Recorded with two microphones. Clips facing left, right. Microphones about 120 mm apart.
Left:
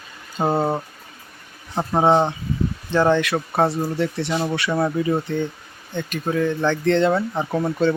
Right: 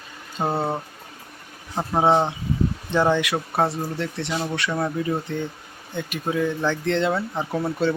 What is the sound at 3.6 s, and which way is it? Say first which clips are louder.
Speech: left 4 dB; 5° left (ahead or behind).